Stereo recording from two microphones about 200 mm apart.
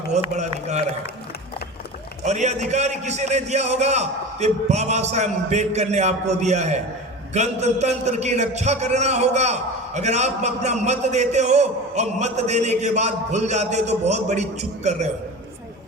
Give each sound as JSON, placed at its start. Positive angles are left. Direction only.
{"t": 0.1, "sound": "a man's voice", "side_deg": -35}
{"t": 2.2, "sound": "a man's voice", "side_deg": -35}